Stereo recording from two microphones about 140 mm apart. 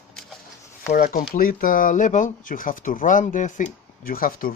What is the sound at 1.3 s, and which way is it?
Speech, 90° left.